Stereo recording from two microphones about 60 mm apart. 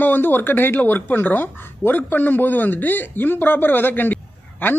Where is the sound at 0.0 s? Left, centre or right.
Left.